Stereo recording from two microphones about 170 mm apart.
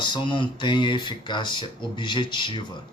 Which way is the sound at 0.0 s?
25° left (ahead or behind).